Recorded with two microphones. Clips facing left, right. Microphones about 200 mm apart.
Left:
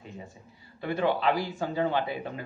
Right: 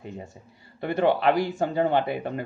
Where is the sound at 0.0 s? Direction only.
55° right (ahead or behind).